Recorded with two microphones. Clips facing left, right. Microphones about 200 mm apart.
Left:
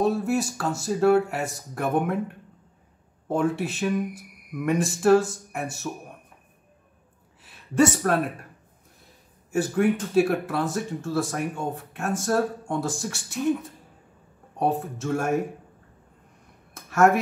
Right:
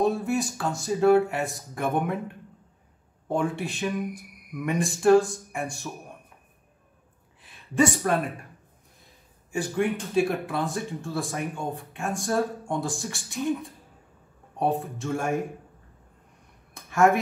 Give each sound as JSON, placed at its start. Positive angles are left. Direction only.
{"t": 0.0, "sound": "speech", "side_deg": 0}
{"t": 3.3, "sound": "speech", "side_deg": 0}
{"t": 7.4, "sound": "a woman's voice", "side_deg": 0}
{"t": 9.6, "sound": "speech", "side_deg": 5}
{"t": 16.9, "sound": "speech", "side_deg": 0}